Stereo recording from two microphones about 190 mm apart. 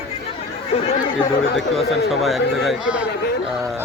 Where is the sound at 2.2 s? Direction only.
Centre (ahead or behind).